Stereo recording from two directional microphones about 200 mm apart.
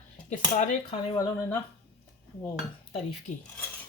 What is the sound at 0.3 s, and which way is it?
Speech, 40° left (ahead or behind).